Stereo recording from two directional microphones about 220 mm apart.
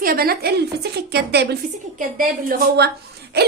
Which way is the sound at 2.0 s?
40° right (ahead or behind).